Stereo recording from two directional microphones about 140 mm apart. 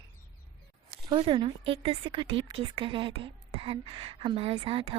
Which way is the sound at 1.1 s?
40° right (ahead or behind).